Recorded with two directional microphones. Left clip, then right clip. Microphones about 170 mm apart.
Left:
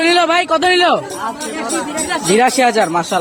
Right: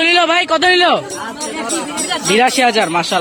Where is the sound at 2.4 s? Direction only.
10° left (ahead or behind).